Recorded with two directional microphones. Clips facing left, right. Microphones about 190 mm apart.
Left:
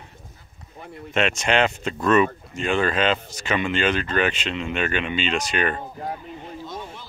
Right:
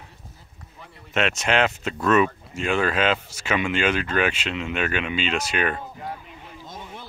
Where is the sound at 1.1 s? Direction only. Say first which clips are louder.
Left 1 dB; centre (ahead or behind).